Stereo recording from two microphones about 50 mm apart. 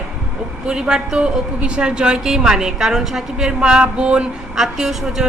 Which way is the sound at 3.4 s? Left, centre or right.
Centre.